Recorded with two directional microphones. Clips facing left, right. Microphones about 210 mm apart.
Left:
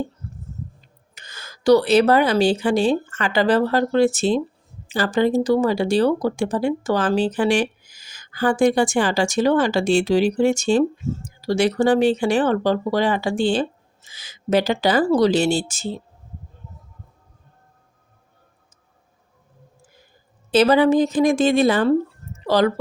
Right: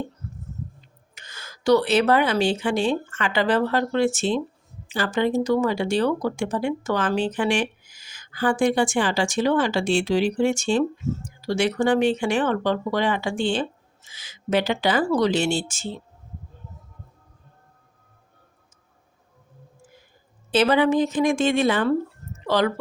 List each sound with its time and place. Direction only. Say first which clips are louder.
1.1 s speech: left 2 dB; 35° left (ahead or behind)
20.5 s a woman's voice: left 4 dB; 40° left (ahead or behind)